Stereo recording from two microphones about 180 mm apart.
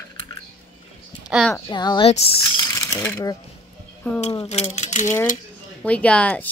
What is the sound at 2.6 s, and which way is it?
Mechanisms, 20° left (ahead or behind).